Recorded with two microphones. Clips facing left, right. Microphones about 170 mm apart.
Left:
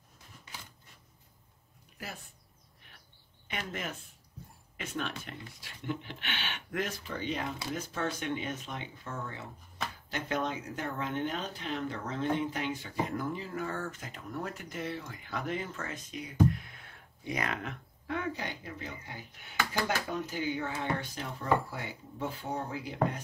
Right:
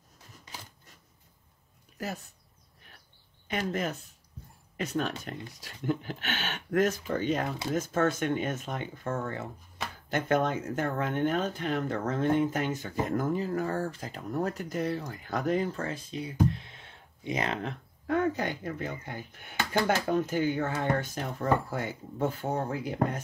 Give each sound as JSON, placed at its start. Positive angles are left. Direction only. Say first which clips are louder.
{"t": 2.0, "sound": "speech", "louder": "right 8 dB", "side_deg": -40}
{"t": 3.4, "sound": "speech", "louder": "right 7 dB", "side_deg": -40}
{"t": 18.0, "sound": "speech", "louder": "right 8 dB", "side_deg": -45}